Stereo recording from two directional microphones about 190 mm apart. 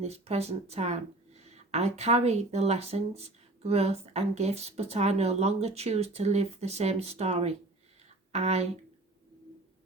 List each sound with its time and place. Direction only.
0.0 s speech: 35° right (ahead or behind)